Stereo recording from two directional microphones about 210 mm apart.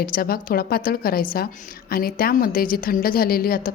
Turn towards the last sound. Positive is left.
turn(degrees=45)  # may be behind; listen again after turning